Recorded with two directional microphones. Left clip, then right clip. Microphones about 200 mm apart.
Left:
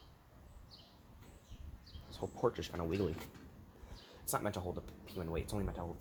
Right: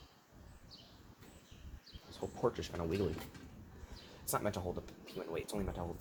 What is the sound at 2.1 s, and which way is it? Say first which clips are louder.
Speech: even; 45° left (ahead or behind).